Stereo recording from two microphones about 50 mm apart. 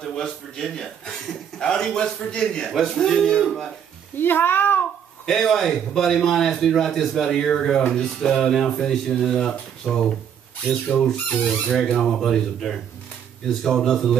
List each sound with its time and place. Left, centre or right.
0.0 s a man's voice: centre
4.2 s speech: left
5.2 s a man's voice: centre
10.7 s speech: left
11.9 s a man's voice: centre